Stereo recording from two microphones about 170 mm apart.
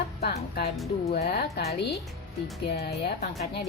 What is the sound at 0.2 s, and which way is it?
A woman's voice, 70° left (ahead or behind).